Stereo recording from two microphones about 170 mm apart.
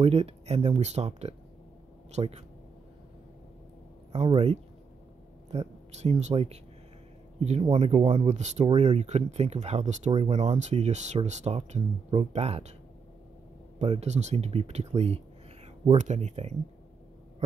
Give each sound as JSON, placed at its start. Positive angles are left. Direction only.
{"t": 0.0, "sound": "speech", "side_deg": -40}
{"t": 4.1, "sound": "speech", "side_deg": -35}
{"t": 13.7, "sound": "speech", "side_deg": -40}